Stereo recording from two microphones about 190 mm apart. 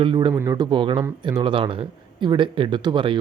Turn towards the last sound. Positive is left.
turn(degrees=-25)  # may be behind; listen again after turning